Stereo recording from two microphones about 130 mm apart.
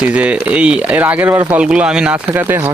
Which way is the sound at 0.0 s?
10° right (ahead or behind).